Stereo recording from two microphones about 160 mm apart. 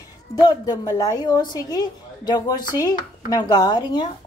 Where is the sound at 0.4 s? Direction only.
25° left (ahead or behind).